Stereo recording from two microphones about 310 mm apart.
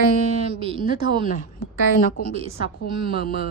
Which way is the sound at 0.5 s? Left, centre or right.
Centre.